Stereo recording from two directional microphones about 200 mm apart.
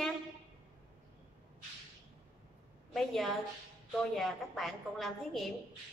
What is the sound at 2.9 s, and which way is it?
A woman's voice, centre (ahead or behind).